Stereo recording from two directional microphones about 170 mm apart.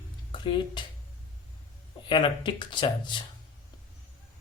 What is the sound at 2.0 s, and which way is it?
Speech, 30° left (ahead or behind).